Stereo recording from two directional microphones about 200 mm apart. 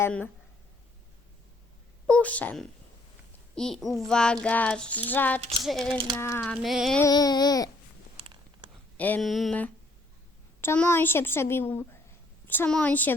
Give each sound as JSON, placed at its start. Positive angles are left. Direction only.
{"t": 0.0, "sound": "a woman's voice", "side_deg": 10}
{"t": 2.0, "sound": "a child's voice", "side_deg": 5}
{"t": 5.4, "sound": "a sound", "side_deg": -30}
{"t": 5.6, "sound": "a child's voice", "side_deg": 0}
{"t": 6.1, "sound": "a child's voice", "side_deg": 10}
{"t": 7.0, "sound": "a sound", "side_deg": 20}
{"t": 9.0, "sound": "a woman's voice", "side_deg": 5}